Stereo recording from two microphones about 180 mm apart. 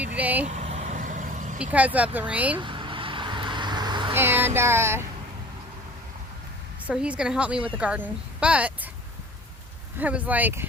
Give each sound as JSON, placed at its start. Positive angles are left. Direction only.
{"t": 0.0, "sound": "speech", "side_deg": -10}
{"t": 0.4, "sound": "vehicle", "side_deg": -40}
{"t": 1.5, "sound": "speech", "side_deg": -10}
{"t": 2.6, "sound": "vehicle", "side_deg": -25}
{"t": 4.1, "sound": "speech", "side_deg": -10}
{"t": 6.8, "sound": "a woman's voice", "side_deg": -5}
{"t": 10.0, "sound": "speech", "side_deg": -10}